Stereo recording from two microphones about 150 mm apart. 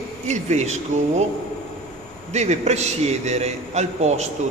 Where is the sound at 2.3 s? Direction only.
50° right (ahead or behind).